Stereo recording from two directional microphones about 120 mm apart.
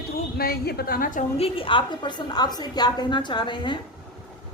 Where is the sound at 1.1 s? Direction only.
55° left (ahead or behind).